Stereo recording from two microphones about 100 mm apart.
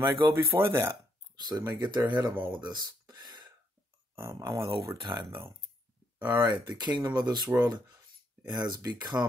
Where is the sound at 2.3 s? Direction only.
20° right (ahead or behind).